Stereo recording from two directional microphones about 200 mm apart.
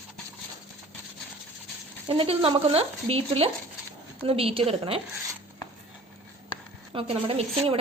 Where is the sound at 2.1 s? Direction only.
30° right (ahead or behind).